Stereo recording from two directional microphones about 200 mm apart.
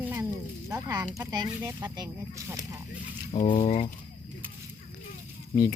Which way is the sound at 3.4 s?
25° left (ahead or behind).